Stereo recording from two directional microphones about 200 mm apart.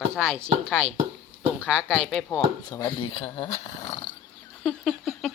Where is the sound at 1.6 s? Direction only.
5° left (ahead or behind).